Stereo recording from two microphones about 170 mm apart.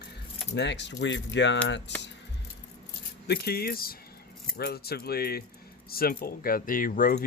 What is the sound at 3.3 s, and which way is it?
Speech, 65° left (ahead or behind).